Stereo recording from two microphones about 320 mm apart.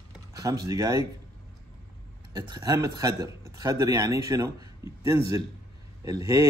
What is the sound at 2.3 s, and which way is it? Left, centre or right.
A man's voice, centre.